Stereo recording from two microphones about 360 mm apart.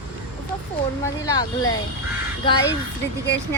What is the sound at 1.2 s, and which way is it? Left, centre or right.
Speech, centre.